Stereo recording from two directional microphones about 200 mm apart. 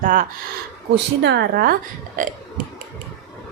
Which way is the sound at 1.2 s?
55° right (ahead or behind).